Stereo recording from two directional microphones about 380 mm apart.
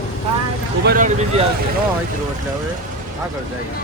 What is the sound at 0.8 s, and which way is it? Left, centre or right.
Speech, right.